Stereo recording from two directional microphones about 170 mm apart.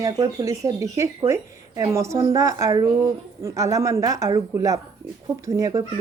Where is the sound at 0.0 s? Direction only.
20° right (ahead or behind).